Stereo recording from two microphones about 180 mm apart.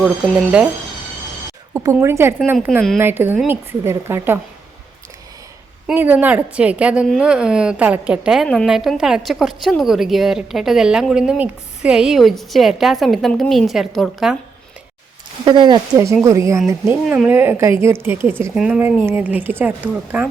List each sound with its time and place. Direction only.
0.0 s speech: 5° right (ahead or behind)
1.7 s speech: 15° right (ahead or behind)
2.7 s a woman's voice: centre (ahead or behind)
3.0 s speech: 10° right (ahead or behind)
5.9 s a woman's voice: 10° right (ahead or behind)
15.4 s speech: 25° right (ahead or behind)
16.8 s speech: 5° right (ahead or behind)